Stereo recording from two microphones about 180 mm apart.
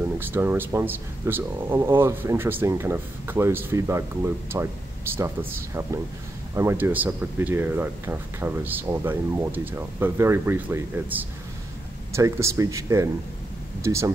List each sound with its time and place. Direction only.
0.2 s speech: 10° right (ahead or behind)
6.5 s speech: 15° right (ahead or behind)